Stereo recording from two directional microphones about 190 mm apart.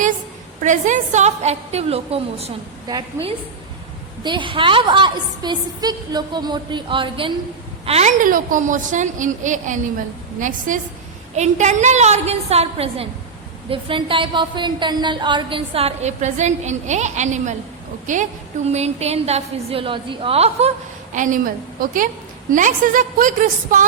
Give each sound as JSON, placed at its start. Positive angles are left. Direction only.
{"t": 0.6, "sound": "a woman's voice", "side_deg": -40}
{"t": 4.2, "sound": "a woman's voice", "side_deg": -25}